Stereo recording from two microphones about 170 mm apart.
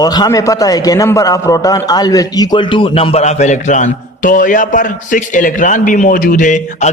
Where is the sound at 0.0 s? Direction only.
25° left (ahead or behind).